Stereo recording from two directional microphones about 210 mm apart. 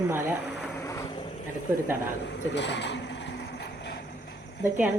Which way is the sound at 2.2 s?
55° left (ahead or behind).